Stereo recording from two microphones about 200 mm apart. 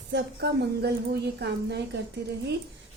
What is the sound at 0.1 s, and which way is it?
A woman's voice, 55° right (ahead or behind).